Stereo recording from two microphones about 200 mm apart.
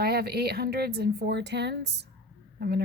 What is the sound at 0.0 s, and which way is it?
A woman's voice, 50° right (ahead or behind).